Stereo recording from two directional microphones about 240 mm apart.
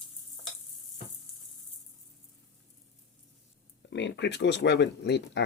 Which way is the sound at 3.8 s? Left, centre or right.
Left.